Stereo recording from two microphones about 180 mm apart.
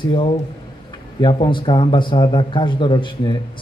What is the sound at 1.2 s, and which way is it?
A man's voice, 25° left (ahead or behind).